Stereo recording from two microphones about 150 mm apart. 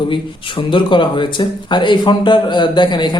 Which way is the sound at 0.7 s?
30° left (ahead or behind).